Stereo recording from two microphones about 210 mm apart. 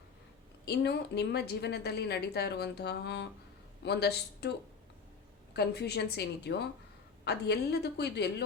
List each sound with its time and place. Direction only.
0.6 s a woman's voice: 50° left (ahead or behind)
5.5 s a woman's voice: 50° left (ahead or behind)